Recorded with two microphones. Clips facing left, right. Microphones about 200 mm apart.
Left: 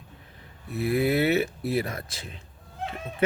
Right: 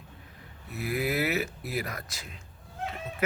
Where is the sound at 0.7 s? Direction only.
30° left (ahead or behind).